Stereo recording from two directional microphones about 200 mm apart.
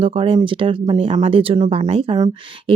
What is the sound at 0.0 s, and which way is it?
Speech, 25° right (ahead or behind).